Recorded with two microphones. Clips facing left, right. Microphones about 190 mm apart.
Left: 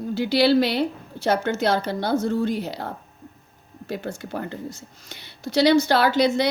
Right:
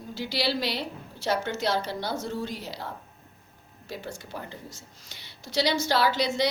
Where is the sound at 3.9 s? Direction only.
60° left (ahead or behind).